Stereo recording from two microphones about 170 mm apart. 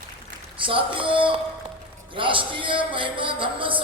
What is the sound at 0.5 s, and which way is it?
A man's voice, 30° right (ahead or behind).